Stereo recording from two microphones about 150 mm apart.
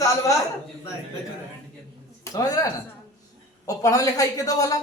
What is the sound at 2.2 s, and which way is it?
Speech, 25° left (ahead or behind).